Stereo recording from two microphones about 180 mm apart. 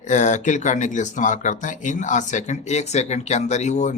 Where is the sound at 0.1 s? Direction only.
40° left (ahead or behind).